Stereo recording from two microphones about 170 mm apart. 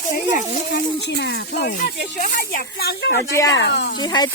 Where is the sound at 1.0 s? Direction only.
90° left; by 3.2 s 70° left (ahead or behind).